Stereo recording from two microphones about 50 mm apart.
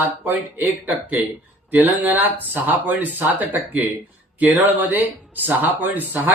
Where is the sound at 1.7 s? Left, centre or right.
Right.